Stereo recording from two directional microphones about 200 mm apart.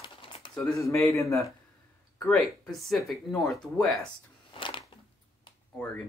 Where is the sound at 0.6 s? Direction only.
15° left (ahead or behind).